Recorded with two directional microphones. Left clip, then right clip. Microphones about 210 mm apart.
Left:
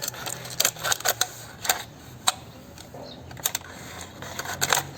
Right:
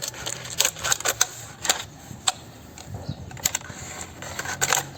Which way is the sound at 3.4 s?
5° right (ahead or behind).